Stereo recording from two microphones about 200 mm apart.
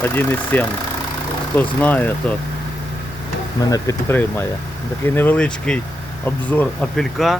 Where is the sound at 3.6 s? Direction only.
20° left (ahead or behind); by 7.4 s centre (ahead or behind).